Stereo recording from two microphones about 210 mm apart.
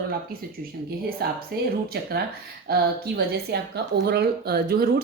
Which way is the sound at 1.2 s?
50° right (ahead or behind).